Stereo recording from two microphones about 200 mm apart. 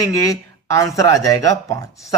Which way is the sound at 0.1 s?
15° left (ahead or behind).